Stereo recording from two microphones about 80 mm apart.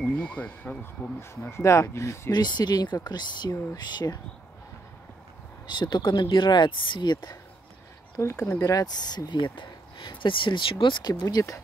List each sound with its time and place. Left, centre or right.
0.0 s speech: centre
1.5 s speech: left
2.3 s speech: left
5.7 s speech: left
8.2 s speech: left
8.5 s speech: left